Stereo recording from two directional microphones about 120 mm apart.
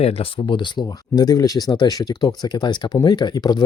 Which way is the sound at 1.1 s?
30° left (ahead or behind).